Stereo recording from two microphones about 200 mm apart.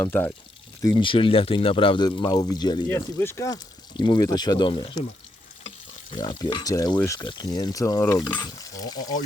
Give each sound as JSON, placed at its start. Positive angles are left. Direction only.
{"t": 0.0, "sound": "speech", "side_deg": 10}
{"t": 0.8, "sound": "speech", "side_deg": 20}